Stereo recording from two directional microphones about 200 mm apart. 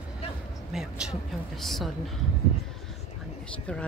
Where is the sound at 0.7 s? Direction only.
5° right (ahead or behind).